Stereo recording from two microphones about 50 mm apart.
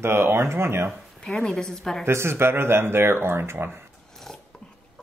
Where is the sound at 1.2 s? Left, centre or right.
Centre.